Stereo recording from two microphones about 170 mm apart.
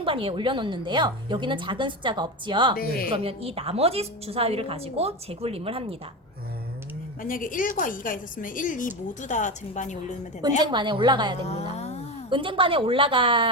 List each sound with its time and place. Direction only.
0.0 s a woman's voice: 30° right (ahead or behind)
2.7 s speech: 60° left (ahead or behind)
3.1 s a woman's voice: 35° right (ahead or behind)
7.2 s a woman's voice: 55° left (ahead or behind)
10.7 s a woman's voice: 25° right (ahead or behind)
11.8 s a sound: 40° left (ahead or behind)
12.3 s a woman's voice: 30° right (ahead or behind)